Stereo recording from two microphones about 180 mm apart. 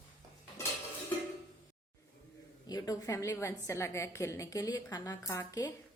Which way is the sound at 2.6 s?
20° left (ahead or behind).